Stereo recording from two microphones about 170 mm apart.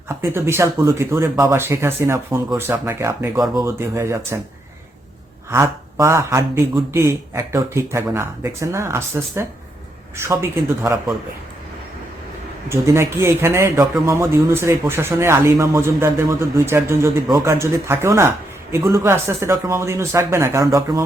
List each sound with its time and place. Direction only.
0.2 s speech: 15° right (ahead or behind)
5.5 s speech: 15° right (ahead or behind)
12.6 s speech: 15° right (ahead or behind)